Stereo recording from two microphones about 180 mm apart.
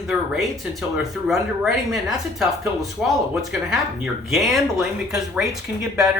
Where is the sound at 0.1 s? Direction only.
Centre (ahead or behind).